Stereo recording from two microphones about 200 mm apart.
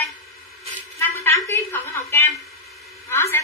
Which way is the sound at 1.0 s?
15° left (ahead or behind).